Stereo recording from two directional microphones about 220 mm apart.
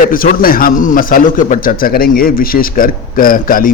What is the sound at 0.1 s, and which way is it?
A man's voice, 40° left (ahead or behind).